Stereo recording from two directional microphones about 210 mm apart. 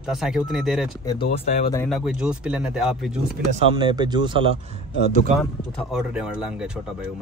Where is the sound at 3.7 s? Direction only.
20° right (ahead or behind).